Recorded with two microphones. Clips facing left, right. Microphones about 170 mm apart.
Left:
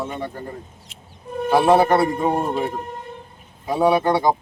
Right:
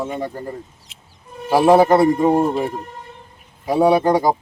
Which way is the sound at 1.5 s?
5° right (ahead or behind).